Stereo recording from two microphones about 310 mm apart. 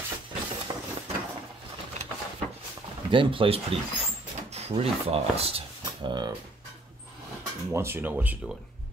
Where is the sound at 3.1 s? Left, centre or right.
Centre.